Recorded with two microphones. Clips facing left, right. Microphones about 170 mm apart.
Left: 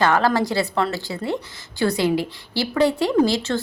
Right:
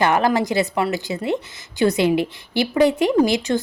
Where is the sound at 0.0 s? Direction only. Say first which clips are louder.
Right 1 dB; 20° right (ahead or behind).